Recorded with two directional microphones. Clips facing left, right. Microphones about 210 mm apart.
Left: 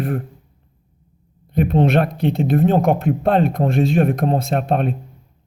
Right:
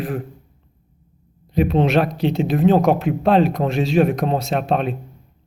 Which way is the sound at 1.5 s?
55° left (ahead or behind).